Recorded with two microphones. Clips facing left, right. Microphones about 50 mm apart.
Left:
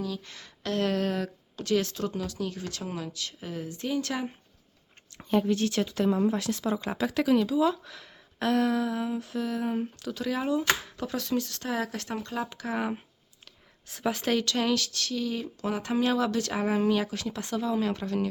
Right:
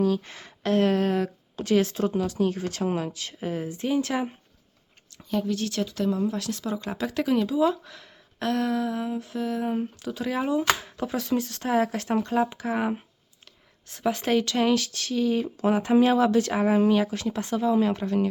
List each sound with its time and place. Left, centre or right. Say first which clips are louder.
0.2 s speech: right 5 dB; right
5.1 s speech: left 2 dB; left
7.0 s speech: even; centre
13.8 s speech: right 3 dB; centre